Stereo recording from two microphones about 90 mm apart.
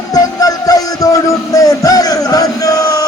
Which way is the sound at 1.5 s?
40° left (ahead or behind).